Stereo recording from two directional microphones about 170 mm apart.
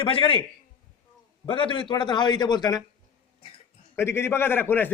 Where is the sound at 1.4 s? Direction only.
30° left (ahead or behind).